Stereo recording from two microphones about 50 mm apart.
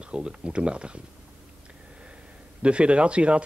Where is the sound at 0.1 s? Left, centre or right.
Right.